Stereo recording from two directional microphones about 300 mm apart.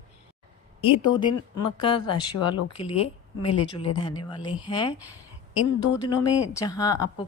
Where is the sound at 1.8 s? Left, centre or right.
Centre.